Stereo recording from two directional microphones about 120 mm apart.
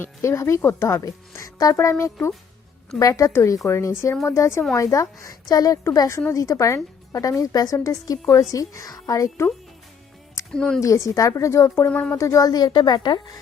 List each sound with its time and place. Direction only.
0.0 s speech: 25° left (ahead or behind)
10.5 s speech: 5° left (ahead or behind)
10.8 s speech: 25° left (ahead or behind)
11.9 s speech: 10° left (ahead or behind)
12.1 s a woman's voice: 25° left (ahead or behind)